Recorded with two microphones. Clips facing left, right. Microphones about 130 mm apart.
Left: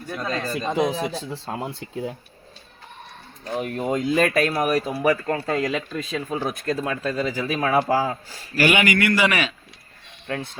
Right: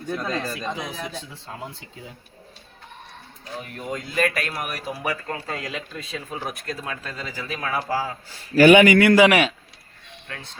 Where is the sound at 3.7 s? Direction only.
60° left (ahead or behind).